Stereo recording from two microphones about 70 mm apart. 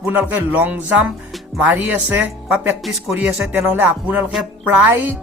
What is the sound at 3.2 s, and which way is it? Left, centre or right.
Speech, centre.